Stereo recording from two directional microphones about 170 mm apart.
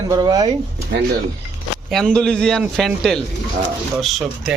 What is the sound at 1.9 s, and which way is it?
Speech, 5° left (ahead or behind).